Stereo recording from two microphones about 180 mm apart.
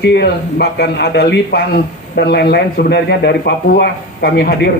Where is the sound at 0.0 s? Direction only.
65° left (ahead or behind).